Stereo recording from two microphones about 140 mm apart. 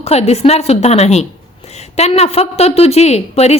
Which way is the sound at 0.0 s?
50° left (ahead or behind).